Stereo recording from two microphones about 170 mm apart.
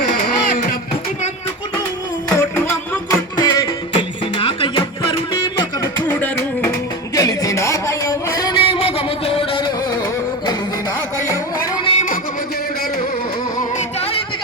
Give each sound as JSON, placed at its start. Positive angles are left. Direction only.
{"t": 0.1, "sound": "a sound", "side_deg": 55}
{"t": 2.4, "sound": "music", "side_deg": 15}
{"t": 6.1, "sound": "music", "side_deg": 10}
{"t": 11.2, "sound": "music", "side_deg": 20}
{"t": 11.9, "sound": "a sound", "side_deg": 45}
{"t": 13.6, "sound": "music", "side_deg": 40}